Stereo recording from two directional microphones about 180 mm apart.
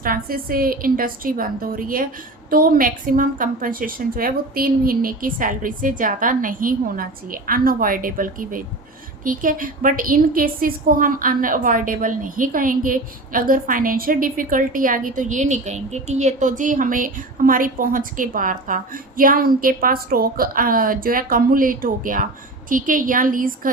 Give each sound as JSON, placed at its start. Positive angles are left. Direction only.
{"t": 0.0, "sound": "a woman's voice", "side_deg": -55}